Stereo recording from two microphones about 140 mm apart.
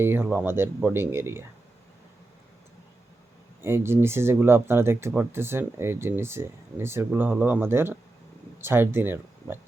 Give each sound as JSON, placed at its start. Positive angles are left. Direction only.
{"t": 0.0, "sound": "speech", "side_deg": -15}
{"t": 3.6, "sound": "speech", "side_deg": -15}